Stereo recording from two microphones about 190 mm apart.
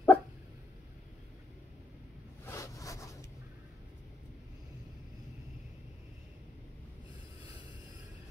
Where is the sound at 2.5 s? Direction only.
15° left (ahead or behind).